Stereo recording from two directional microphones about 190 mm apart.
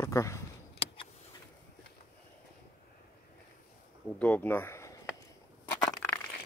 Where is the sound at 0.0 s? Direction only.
15° left (ahead or behind).